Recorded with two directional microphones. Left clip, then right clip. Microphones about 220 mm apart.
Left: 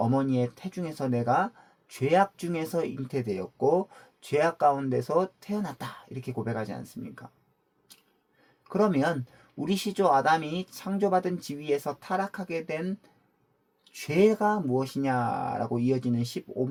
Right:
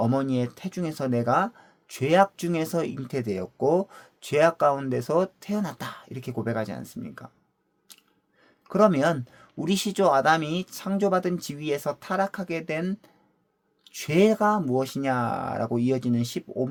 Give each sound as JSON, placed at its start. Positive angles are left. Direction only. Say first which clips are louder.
{"t": 0.0, "sound": "speech", "louder": "right 1 dB", "side_deg": -40}
{"t": 7.9, "sound": "a sound", "louder": "right 4 dB", "side_deg": -40}
{"t": 8.6, "sound": "speech", "louder": "right 5 dB", "side_deg": -40}